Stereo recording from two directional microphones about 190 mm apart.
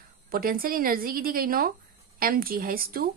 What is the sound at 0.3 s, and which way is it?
A woman's voice, 50° right (ahead or behind).